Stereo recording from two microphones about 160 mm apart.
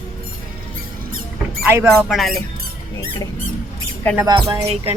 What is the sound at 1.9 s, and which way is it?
Speech, centre (ahead or behind).